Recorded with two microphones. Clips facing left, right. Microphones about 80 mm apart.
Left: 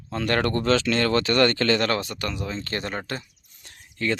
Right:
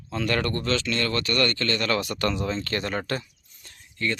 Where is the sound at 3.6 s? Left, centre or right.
Left.